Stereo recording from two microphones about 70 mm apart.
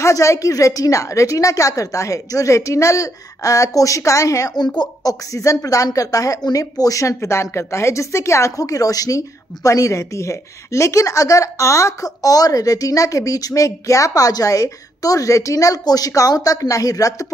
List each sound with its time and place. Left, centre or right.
0.0 s speech: left